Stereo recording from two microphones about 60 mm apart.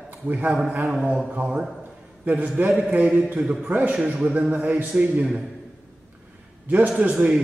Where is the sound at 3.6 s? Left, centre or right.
Right.